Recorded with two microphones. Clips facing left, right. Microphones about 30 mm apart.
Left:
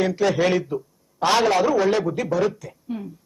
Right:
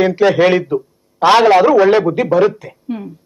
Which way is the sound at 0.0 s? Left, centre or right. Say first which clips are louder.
Right 9 dB; right.